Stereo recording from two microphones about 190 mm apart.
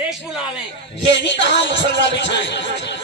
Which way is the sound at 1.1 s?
70° left (ahead or behind).